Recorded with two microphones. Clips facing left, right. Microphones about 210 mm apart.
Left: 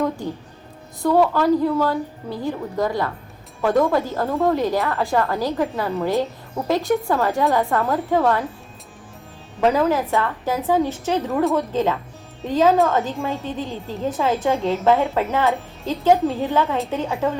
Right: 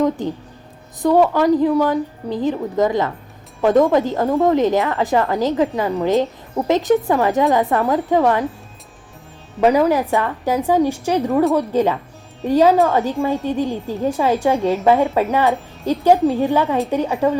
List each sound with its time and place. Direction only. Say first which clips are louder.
1.0 s a woman's voice: right 3 dB; 15° right (ahead or behind)
9.6 s a woman's voice: right 4 dB; 15° right (ahead or behind)